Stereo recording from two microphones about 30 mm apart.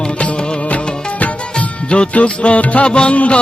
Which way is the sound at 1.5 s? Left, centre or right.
Left.